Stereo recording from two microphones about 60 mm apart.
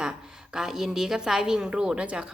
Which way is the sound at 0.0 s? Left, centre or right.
Centre.